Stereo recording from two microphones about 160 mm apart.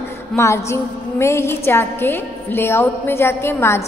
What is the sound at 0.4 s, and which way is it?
A woman's voice, 15° left (ahead or behind).